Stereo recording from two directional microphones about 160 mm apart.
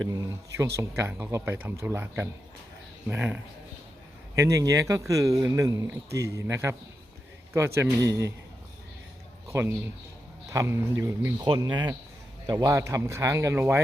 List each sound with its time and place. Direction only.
0.1 s speech: 20° right (ahead or behind)
7.8 s speech: 20° right (ahead or behind)
9.5 s a man's voice: 20° right (ahead or behind)
11.4 s speech: 30° right (ahead or behind)